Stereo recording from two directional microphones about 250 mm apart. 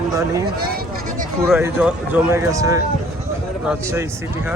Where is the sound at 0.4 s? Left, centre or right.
Right.